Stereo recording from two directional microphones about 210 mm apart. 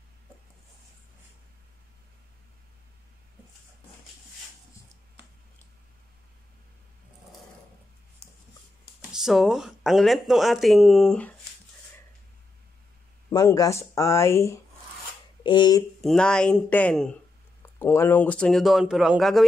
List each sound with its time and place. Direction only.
9.1 s speech: centre (ahead or behind)
13.3 s speech: 15° left (ahead or behind)
16.0 s speech: 5° left (ahead or behind)